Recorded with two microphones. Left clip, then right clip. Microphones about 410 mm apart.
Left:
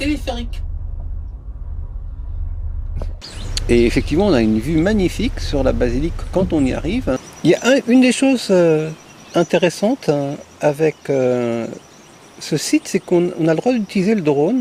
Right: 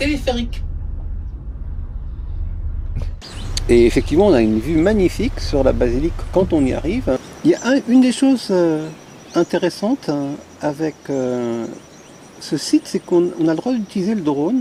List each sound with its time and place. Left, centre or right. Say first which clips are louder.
0.0 s music: right 3 dB; centre
3.5 s speech: right 2 dB; centre
7.4 s speech: left 3 dB; left